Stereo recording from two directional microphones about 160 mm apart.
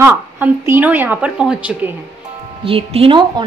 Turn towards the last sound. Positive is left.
turn(degrees=-35)  # may be behind; listen again after turning